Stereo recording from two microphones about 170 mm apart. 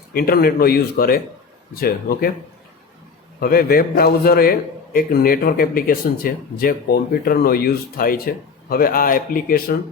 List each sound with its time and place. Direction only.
0.1 s a man's voice: 60° left (ahead or behind)
3.4 s a man's voice: 60° left (ahead or behind)